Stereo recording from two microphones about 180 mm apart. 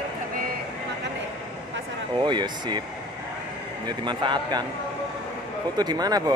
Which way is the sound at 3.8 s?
25° right (ahead or behind).